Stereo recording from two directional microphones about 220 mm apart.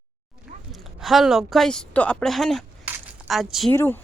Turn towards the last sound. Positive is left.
turn(degrees=10)  # may be behind; listen again after turning